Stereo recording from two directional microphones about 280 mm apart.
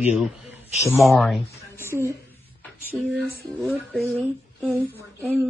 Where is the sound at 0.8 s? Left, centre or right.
Centre.